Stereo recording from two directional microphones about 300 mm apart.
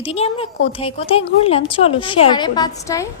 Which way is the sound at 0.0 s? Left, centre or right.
Centre.